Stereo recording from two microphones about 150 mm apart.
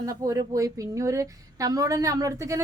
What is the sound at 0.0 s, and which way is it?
Speech, 20° right (ahead or behind).